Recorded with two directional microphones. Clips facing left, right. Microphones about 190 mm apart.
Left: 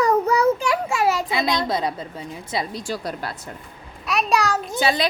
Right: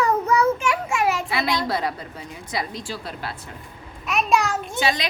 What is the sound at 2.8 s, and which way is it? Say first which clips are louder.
A child's voice: left 4 dB; 45° left (ahead or behind).